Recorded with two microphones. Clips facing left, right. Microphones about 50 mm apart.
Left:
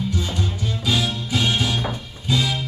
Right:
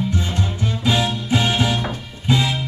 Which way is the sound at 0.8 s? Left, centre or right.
Right.